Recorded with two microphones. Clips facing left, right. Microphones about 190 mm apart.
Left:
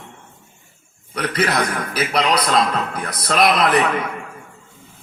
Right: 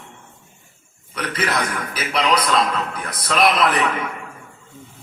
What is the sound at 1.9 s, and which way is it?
A man's voice, 40° left (ahead or behind).